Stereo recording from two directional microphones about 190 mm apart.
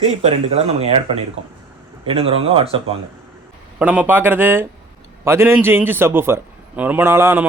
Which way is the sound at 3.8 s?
10° right (ahead or behind).